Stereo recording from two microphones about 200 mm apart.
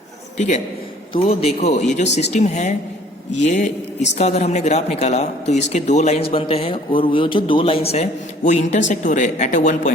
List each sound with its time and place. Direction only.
0.3 s a man's voice: 35° left (ahead or behind)